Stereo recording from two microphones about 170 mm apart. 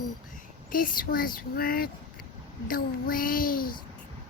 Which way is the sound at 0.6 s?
55° left (ahead or behind).